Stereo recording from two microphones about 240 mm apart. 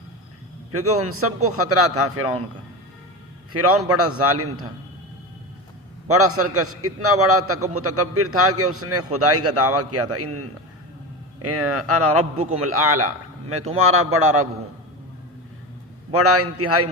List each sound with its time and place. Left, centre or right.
0.7 s a man's voice: right
3.5 s a man's voice: right
6.1 s a man's voice: right
16.1 s a man's voice: right